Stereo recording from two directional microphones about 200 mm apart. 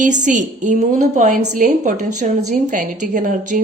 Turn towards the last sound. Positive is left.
turn(degrees=-40)  # may be behind; listen again after turning